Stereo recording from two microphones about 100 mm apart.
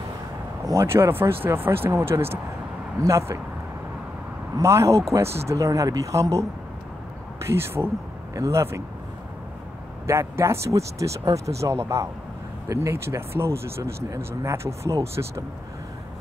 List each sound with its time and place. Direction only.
0.7 s speech: 30° right (ahead or behind)
4.6 s speech: 30° right (ahead or behind)
7.4 s speech: 25° right (ahead or behind)
10.0 s speech: 25° right (ahead or behind)